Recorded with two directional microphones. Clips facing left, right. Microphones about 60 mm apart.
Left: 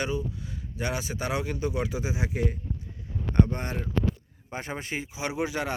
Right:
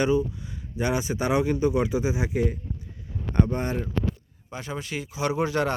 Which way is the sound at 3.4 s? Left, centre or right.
Centre.